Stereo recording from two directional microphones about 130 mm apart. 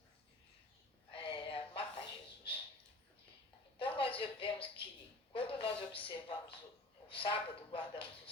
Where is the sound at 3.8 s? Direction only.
40° left (ahead or behind).